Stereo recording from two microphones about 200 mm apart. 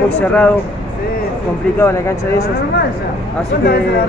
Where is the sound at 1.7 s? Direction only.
10° left (ahead or behind).